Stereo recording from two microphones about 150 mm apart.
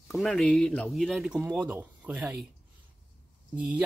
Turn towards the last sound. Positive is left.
turn(degrees=-10)  # may be behind; listen again after turning